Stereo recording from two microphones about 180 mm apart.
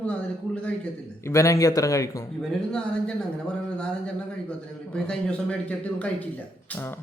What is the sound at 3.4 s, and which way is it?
Speech, 5° left (ahead or behind).